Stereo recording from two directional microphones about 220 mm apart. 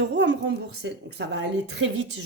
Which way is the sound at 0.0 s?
50° right (ahead or behind).